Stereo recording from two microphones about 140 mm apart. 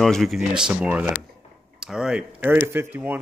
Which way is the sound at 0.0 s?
Centre (ahead or behind).